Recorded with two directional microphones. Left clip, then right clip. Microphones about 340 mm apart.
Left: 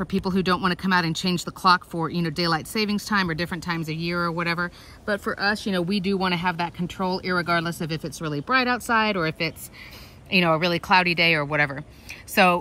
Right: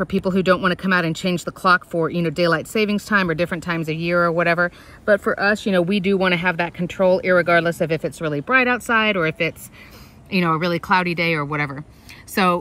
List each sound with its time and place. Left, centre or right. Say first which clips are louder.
0.0 s speech: right 6 dB; centre